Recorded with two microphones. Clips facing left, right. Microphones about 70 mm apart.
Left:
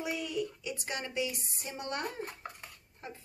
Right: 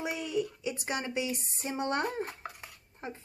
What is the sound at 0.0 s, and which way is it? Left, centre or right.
Speech, right.